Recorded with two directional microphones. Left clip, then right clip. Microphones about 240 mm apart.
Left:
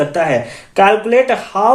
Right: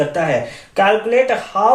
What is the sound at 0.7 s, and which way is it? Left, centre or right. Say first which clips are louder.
Speech: left 3 dB; left.